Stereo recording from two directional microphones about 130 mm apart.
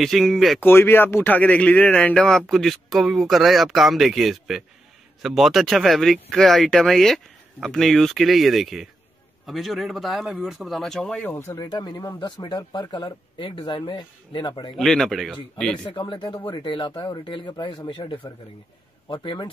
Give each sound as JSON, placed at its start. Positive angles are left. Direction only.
{"t": 0.0, "sound": "speech", "side_deg": 0}
{"t": 0.6, "sound": "speech", "side_deg": 15}
{"t": 11.3, "sound": "speech", "side_deg": 25}
{"t": 14.8, "sound": "speech", "side_deg": 0}
{"t": 15.9, "sound": "speech", "side_deg": 40}